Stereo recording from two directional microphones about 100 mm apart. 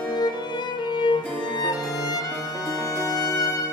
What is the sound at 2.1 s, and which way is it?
Music, 40° left (ahead or behind).